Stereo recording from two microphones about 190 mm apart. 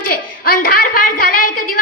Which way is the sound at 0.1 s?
50° left (ahead or behind).